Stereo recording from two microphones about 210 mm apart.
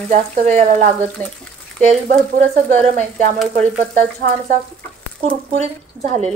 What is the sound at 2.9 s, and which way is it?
Speech, 35° right (ahead or behind).